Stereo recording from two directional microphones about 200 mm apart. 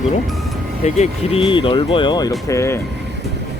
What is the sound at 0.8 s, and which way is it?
Speech, 35° left (ahead or behind).